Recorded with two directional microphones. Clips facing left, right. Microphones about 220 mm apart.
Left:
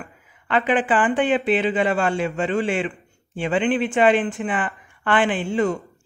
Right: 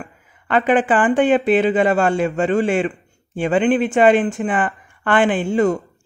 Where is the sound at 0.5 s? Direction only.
45° right (ahead or behind).